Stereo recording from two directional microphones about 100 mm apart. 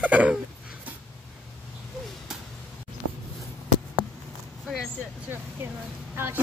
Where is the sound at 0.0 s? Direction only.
15° right (ahead or behind).